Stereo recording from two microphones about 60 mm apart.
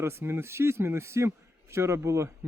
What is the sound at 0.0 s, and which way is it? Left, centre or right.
A man's voice, right.